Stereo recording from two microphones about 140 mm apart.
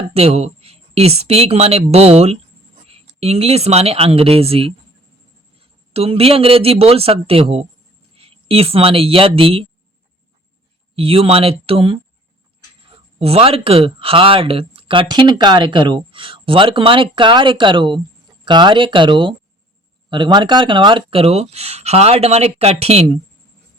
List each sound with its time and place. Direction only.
0.1 s speech: 45° right (ahead or behind)
5.9 s speech: 45° right (ahead or behind)
10.9 s speech: 40° right (ahead or behind)
13.1 s speech: 45° right (ahead or behind)